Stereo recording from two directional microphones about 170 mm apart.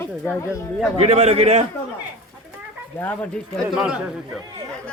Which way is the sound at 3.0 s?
10° left (ahead or behind).